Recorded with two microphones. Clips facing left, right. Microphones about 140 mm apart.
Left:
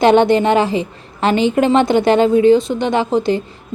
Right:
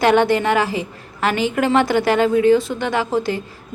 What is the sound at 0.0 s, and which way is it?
A woman's voice, 25° left (ahead or behind).